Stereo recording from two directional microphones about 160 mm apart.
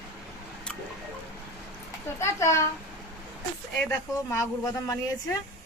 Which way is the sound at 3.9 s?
20° left (ahead or behind).